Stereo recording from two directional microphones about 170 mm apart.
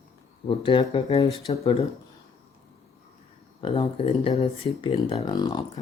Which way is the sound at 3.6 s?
30° left (ahead or behind).